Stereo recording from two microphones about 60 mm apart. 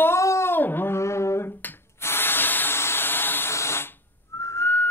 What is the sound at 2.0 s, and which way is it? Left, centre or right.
Hiss, left.